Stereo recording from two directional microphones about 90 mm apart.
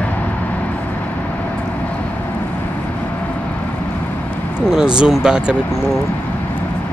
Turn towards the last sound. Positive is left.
turn(degrees=-10)  # may be behind; listen again after turning